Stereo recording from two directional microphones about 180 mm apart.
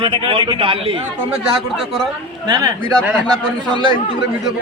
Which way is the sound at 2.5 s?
20° right (ahead or behind).